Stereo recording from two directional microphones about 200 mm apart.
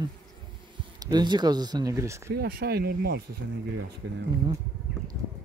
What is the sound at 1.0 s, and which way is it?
Speech, 20° right (ahead or behind).